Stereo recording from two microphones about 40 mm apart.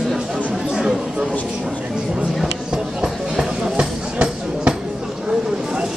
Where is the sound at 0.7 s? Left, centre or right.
Centre.